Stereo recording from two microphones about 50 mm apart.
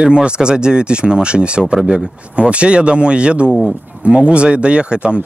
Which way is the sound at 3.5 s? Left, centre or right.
Centre.